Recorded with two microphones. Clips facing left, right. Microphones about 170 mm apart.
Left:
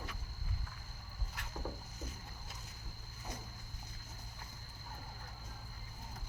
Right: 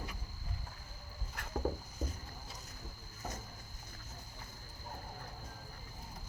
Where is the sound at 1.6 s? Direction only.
40° right (ahead or behind).